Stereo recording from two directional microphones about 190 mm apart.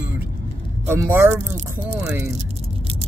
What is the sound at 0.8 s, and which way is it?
Speech, 10° right (ahead or behind).